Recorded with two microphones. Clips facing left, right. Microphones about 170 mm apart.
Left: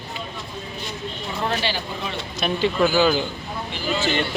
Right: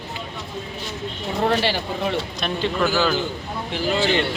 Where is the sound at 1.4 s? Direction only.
60° right (ahead or behind).